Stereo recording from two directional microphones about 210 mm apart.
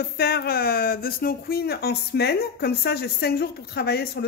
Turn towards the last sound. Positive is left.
turn(degrees=50)  # may be behind; listen again after turning